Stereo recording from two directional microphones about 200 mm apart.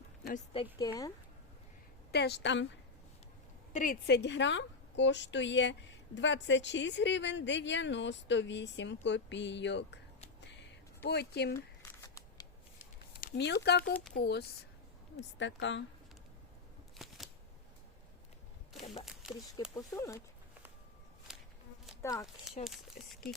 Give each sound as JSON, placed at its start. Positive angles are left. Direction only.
{"t": 0.5, "sound": "a woman's voice", "side_deg": 25}
{"t": 2.1, "sound": "a woman's voice", "side_deg": 55}
{"t": 3.7, "sound": "a woman's voice", "side_deg": 40}
{"t": 4.0, "sound": "a woman's voice", "side_deg": 60}
{"t": 11.0, "sound": "a woman's voice", "side_deg": 55}
{"t": 11.5, "sound": "a sound", "side_deg": 15}
{"t": 13.2, "sound": "a woman's voice", "side_deg": 55}
{"t": 17.0, "sound": "shuffling cards", "side_deg": 0}
{"t": 18.7, "sound": "a sound", "side_deg": 0}
{"t": 19.7, "sound": "speech", "side_deg": 15}
{"t": 21.3, "sound": "insect", "side_deg": 0}
{"t": 22.0, "sound": "speech", "side_deg": 15}
{"t": 23.0, "sound": "speech", "side_deg": 45}